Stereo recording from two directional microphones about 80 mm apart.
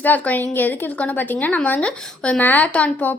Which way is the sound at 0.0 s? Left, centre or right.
Left.